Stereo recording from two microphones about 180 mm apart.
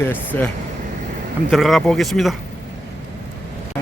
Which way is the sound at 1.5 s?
Centre (ahead or behind).